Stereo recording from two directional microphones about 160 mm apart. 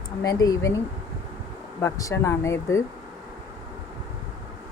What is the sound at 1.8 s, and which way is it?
Speech, 20° left (ahead or behind).